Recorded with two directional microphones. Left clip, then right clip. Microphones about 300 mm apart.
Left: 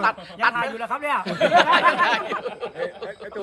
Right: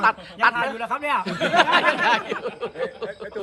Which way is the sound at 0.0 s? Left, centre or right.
Centre.